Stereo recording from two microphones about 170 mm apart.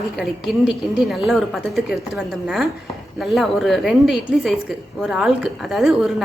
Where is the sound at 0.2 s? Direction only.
5° right (ahead or behind).